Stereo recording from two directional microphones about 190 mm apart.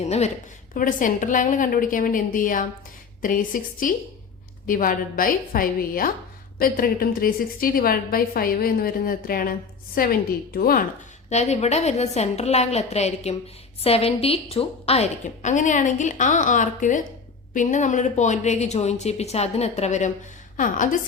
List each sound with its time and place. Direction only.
0.0 s a woman's voice: 35° left (ahead or behind)
0.7 s a woman's voice: 45° left (ahead or behind)
11.3 s a woman's voice: 35° left (ahead or behind)